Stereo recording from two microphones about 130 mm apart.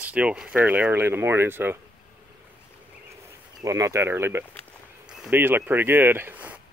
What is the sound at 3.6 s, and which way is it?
Speech, 25° right (ahead or behind).